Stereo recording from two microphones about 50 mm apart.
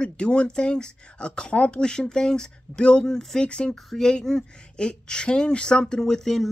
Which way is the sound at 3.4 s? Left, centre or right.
Left.